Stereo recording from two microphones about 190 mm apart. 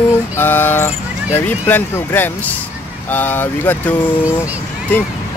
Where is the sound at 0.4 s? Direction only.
10° left (ahead or behind).